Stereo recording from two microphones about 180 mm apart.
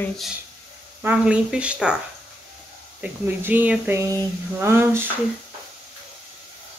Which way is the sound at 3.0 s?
10° right (ahead or behind).